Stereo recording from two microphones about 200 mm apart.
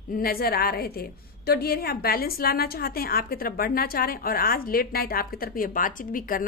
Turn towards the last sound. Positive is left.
turn(degrees=45)  # may be behind; listen again after turning